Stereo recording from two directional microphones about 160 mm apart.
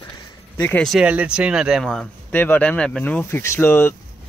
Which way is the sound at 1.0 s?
10° right (ahead or behind).